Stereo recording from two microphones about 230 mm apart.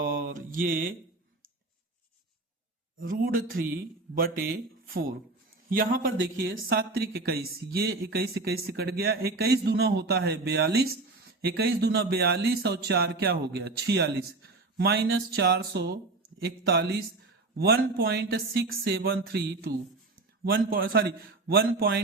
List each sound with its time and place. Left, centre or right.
0.0 s mantra: right
3.1 s speech: right
5.6 s a man's voice: right